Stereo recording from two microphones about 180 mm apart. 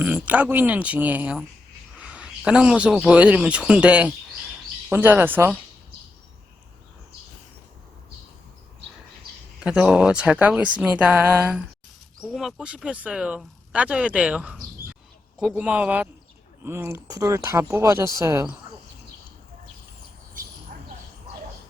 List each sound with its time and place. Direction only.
0.0 s speech: 10° right (ahead or behind)
2.0 s a sound: 5° right (ahead or behind)
3.1 s speech: 5° right (ahead or behind)
9.6 s speech: 5° right (ahead or behind)